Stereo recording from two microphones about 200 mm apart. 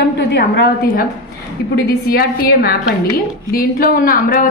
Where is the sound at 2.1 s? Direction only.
50° left (ahead or behind).